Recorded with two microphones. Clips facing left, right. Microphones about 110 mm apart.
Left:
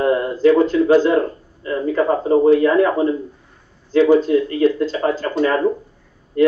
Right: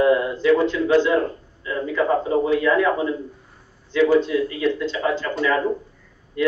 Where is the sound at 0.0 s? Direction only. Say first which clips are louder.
Left 3 dB; 35° left (ahead or behind).